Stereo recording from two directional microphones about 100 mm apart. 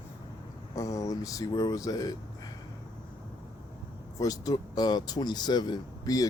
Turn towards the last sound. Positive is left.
turn(degrees=40)  # may be behind; listen again after turning